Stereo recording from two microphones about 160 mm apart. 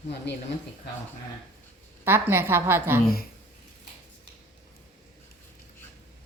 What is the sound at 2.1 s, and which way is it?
Speech, 15° right (ahead or behind).